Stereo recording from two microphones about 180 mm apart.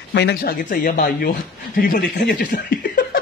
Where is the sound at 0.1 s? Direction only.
65° left (ahead or behind).